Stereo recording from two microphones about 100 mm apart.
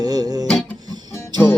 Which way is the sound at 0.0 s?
40° right (ahead or behind).